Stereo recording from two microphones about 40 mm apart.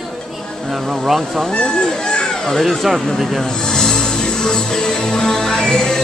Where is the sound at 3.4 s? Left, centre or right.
Centre.